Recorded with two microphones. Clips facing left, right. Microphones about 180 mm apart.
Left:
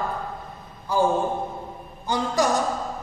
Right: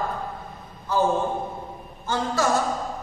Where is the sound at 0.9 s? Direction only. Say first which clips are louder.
Left 1 dB; 10° left (ahead or behind).